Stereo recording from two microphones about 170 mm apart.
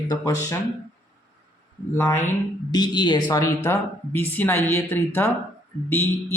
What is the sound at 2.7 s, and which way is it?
Speech, 25° left (ahead or behind).